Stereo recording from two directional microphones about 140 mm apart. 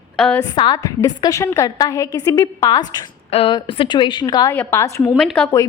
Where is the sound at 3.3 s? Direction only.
40° left (ahead or behind).